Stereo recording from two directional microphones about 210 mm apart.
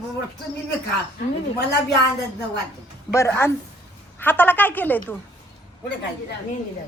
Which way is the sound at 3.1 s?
15° left (ahead or behind).